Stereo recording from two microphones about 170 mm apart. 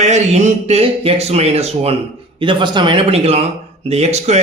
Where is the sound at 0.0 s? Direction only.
40° right (ahead or behind).